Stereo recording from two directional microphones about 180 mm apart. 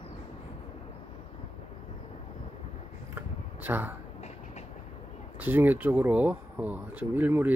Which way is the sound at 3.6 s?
10° right (ahead or behind).